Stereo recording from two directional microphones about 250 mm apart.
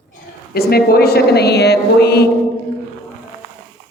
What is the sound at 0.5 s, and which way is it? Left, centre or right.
A woman's voice, left.